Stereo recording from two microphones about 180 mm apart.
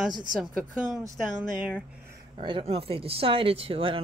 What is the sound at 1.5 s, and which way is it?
Speech, 5° right (ahead or behind).